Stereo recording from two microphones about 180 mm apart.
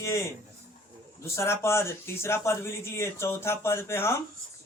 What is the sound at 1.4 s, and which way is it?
Speech, 15° left (ahead or behind).